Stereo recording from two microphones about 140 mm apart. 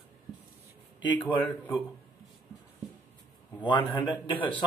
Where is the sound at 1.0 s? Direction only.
35° left (ahead or behind).